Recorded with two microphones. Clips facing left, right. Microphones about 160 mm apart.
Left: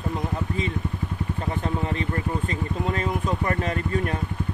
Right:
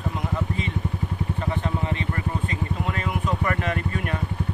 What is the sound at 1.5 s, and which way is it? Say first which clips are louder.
Vehicle: left 3 dB; 40° left (ahead or behind).